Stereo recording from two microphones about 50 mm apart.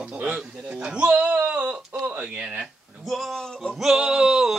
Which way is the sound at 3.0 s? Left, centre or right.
Centre.